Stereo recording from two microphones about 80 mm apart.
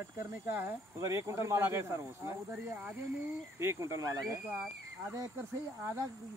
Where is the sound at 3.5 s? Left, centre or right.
Right.